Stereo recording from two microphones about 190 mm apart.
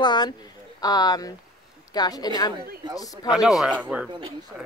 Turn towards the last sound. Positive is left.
turn(degrees=-5)  # may be behind; listen again after turning